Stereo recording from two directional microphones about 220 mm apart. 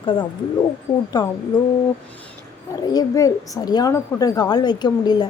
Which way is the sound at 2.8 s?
15° left (ahead or behind).